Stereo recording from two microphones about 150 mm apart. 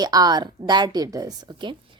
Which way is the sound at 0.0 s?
25° right (ahead or behind).